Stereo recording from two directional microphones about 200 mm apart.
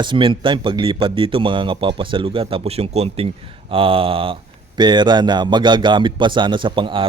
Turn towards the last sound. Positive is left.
turn(degrees=-25)  # may be behind; listen again after turning